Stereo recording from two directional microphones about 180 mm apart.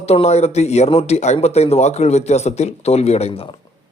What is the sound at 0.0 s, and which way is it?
A man's voice, 35° left (ahead or behind).